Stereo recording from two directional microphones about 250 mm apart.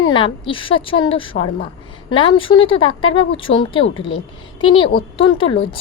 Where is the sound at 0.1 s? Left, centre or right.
Centre.